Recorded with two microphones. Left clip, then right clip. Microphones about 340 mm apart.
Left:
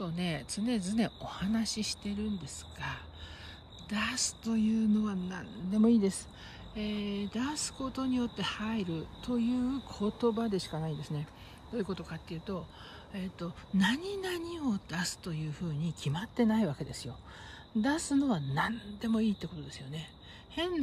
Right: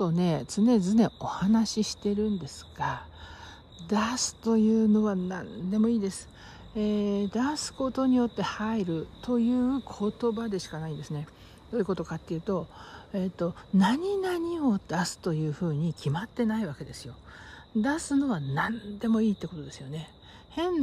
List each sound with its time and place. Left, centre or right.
0.1 s speech: centre